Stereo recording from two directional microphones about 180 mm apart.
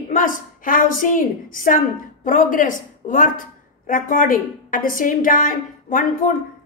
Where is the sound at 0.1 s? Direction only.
50° left (ahead or behind).